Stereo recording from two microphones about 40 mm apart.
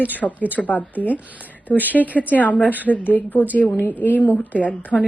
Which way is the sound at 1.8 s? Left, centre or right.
Right.